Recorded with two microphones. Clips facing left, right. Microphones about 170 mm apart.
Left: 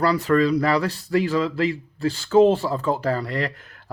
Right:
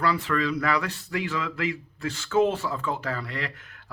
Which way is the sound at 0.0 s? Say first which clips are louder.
Left 7 dB; 40° left (ahead or behind).